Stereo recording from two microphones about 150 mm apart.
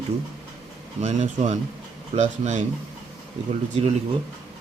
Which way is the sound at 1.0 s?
50° right (ahead or behind).